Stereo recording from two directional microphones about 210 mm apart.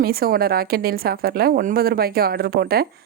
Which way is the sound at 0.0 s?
45° right (ahead or behind).